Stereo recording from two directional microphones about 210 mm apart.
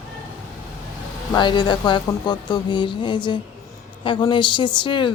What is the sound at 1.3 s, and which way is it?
Speech, 20° left (ahead or behind).